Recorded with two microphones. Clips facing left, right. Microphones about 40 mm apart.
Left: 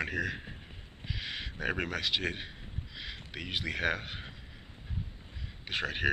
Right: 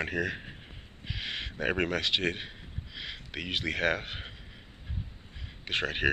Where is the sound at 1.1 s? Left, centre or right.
Centre.